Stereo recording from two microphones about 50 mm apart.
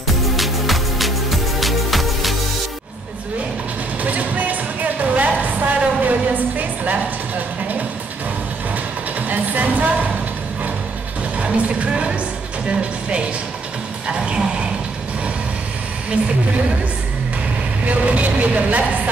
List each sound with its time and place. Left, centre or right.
0.4 s music: centre
4.0 s music: right
9.3 s music: right
11.3 s music: right
17.8 s music: right